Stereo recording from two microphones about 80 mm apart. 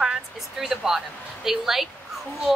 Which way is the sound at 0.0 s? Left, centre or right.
Centre.